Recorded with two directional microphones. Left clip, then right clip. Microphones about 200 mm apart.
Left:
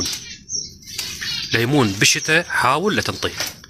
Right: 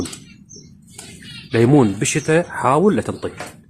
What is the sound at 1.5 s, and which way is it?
Speech, centre (ahead or behind).